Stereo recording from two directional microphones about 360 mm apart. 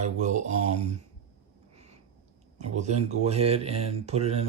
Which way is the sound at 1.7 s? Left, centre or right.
Centre.